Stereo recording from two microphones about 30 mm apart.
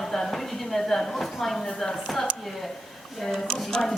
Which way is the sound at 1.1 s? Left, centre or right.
Centre.